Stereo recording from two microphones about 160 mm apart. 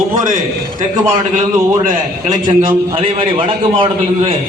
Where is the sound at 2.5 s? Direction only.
30° right (ahead or behind).